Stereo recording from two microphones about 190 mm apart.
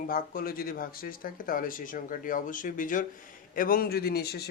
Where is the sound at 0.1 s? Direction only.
50° left (ahead or behind).